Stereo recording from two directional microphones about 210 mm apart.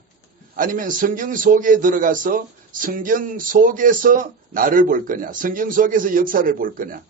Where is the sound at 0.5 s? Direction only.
40° right (ahead or behind).